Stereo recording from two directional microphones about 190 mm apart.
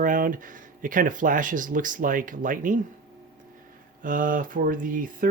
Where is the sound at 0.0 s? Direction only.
45° right (ahead or behind).